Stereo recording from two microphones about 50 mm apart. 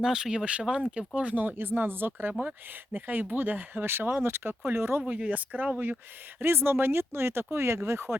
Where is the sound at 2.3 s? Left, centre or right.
Right.